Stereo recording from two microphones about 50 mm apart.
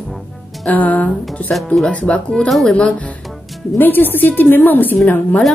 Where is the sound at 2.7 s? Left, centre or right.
Left.